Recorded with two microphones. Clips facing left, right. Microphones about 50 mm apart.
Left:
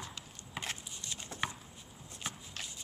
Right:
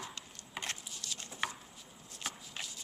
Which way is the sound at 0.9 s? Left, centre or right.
Left.